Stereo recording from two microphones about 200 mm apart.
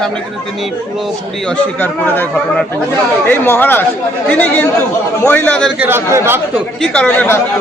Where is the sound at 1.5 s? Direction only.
10° left (ahead or behind).